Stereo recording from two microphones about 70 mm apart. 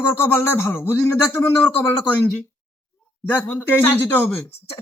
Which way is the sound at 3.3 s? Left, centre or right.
Left.